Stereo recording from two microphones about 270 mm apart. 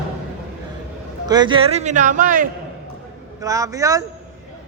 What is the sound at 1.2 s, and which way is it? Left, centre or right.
A man's voice, centre.